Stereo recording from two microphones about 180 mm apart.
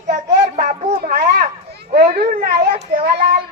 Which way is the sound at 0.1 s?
50° right (ahead or behind).